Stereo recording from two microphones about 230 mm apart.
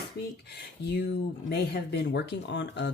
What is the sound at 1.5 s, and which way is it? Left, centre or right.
Speech, left.